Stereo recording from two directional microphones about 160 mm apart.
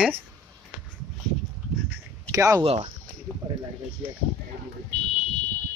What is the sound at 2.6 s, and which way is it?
Speech, 40° right (ahead or behind).